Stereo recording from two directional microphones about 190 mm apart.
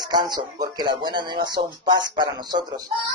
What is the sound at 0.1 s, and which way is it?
A man's voice, 20° right (ahead or behind).